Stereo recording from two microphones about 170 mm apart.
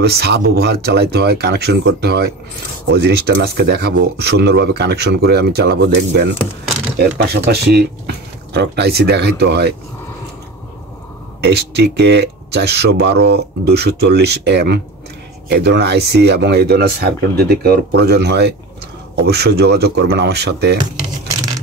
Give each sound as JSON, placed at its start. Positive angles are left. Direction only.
{"t": 0.0, "sound": "speech", "side_deg": -75}
{"t": 11.4, "sound": "speech", "side_deg": -75}